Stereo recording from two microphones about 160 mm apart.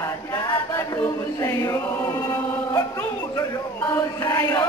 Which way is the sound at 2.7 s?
20° left (ahead or behind).